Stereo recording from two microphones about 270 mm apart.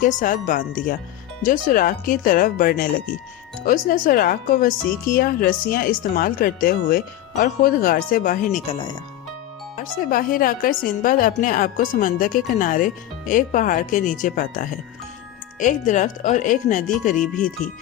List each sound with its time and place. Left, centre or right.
0.0 s a woman's voice: left
9.7 s a woman's voice: left